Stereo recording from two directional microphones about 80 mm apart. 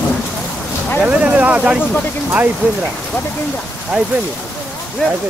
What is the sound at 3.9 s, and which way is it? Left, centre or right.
Speech, centre.